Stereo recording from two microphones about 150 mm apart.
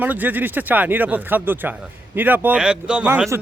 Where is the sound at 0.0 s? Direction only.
10° right (ahead or behind).